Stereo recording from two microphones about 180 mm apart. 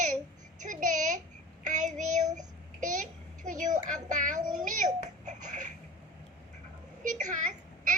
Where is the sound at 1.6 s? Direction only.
45° right (ahead or behind).